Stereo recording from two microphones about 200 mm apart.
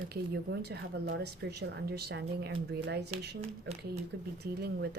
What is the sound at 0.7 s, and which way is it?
A woman's voice, 55° right (ahead or behind).